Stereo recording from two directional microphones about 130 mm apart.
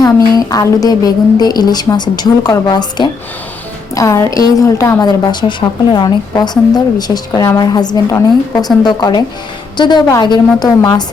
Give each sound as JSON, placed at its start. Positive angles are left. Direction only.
{"t": 0.3, "sound": "a woman's voice", "side_deg": 30}